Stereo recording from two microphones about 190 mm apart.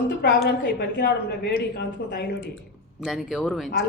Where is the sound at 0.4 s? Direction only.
65° left (ahead or behind).